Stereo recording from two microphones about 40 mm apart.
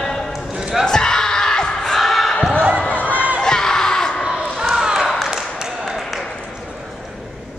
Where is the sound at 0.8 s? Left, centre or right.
Centre.